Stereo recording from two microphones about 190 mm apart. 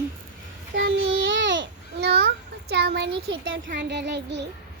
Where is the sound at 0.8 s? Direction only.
65° right (ahead or behind).